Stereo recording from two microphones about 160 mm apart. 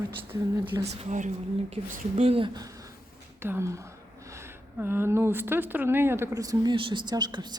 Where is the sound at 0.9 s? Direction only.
45° right (ahead or behind).